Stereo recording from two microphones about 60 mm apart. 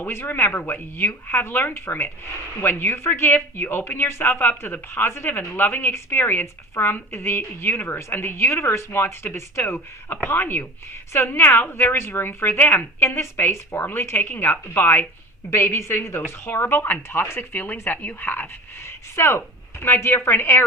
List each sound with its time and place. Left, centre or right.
0.0 s a woman's voice: left
10.2 s a woman's voice: left
13.0 s a woman's voice: left
15.4 s a woman's voice: left
18.9 s a woman's voice: left